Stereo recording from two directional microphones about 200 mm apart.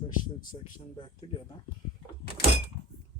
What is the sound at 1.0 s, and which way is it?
Speech, 25° left (ahead or behind).